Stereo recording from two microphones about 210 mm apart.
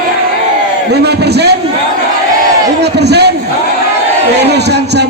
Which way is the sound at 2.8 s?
50° right (ahead or behind).